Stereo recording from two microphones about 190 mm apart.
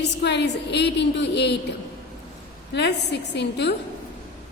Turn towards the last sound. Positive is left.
turn(degrees=65)  # may be behind; listen again after turning